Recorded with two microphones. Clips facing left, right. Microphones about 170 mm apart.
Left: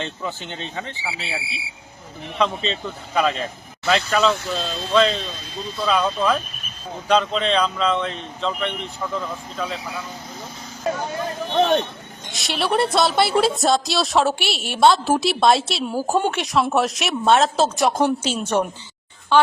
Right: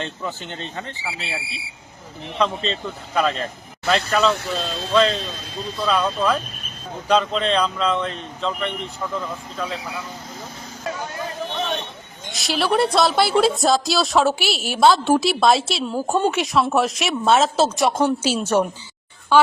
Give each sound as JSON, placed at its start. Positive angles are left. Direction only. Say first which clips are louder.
{"t": 0.0, "sound": "a woman's voice", "louder": "even", "side_deg": 5}
{"t": 2.4, "sound": "a woman's voice", "louder": "even", "side_deg": 0}
{"t": 11.5, "sound": "speech", "louder": "left 10 dB", "side_deg": 45}
{"t": 12.3, "sound": "a woman's voice", "louder": "right 1 dB", "side_deg": 0}